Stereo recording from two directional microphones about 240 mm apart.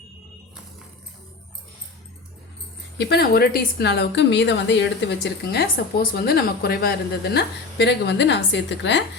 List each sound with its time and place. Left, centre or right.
3.0 s a woman's voice: left